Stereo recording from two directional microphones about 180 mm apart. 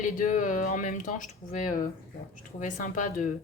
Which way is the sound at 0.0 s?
45° left (ahead or behind).